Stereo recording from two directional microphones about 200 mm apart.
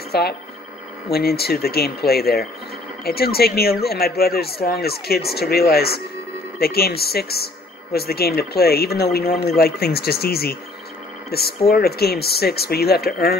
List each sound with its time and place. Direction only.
0.1 s speech: 55° left (ahead or behind)